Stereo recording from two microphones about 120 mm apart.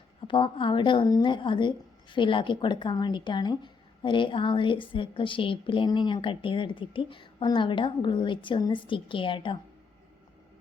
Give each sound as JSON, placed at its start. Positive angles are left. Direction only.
{"t": 0.3, "sound": "a woman's voice", "side_deg": 45}